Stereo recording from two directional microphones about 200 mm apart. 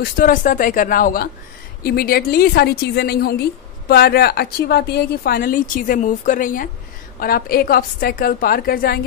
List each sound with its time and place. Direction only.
0.0 s a woman's voice: 40° left (ahead or behind)